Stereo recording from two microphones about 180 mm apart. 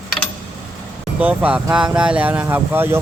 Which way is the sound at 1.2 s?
10° right (ahead or behind).